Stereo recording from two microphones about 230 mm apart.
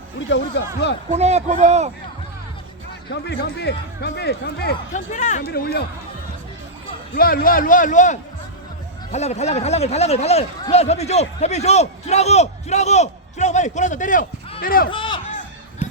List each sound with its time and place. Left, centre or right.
0.3 s speech: left
1.1 s a man's voice: right
3.1 s speech: left
5.5 s speech: left
7.2 s a man's voice: left
14.8 s a sound: left